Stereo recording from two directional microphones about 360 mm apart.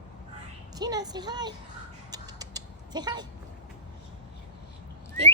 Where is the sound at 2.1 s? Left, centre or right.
Centre.